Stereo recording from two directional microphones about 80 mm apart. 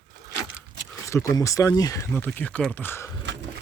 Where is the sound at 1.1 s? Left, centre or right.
Left.